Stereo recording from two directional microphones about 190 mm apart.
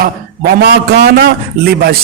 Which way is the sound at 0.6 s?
55° right (ahead or behind).